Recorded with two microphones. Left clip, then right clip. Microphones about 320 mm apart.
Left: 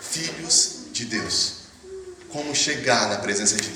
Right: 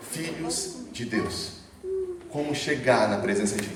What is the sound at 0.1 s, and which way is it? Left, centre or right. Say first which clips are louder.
Speech: left 3 dB; right.